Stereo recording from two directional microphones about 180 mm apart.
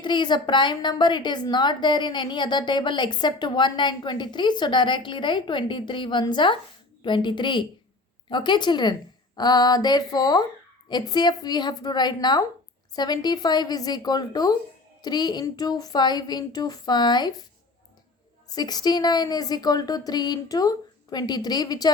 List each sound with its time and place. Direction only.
0.0 s a woman's voice: 25° left (ahead or behind)
18.4 s a woman's voice: 20° left (ahead or behind)